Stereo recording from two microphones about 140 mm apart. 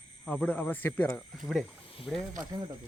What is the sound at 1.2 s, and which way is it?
Speech, centre (ahead or behind).